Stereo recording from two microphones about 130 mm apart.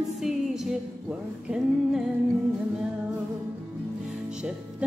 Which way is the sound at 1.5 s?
5° right (ahead or behind).